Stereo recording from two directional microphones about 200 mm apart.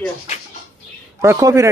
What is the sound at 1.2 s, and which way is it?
Speech, 15° right (ahead or behind).